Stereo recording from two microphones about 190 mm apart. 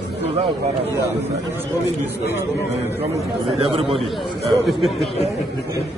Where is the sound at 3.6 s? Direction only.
25° right (ahead or behind).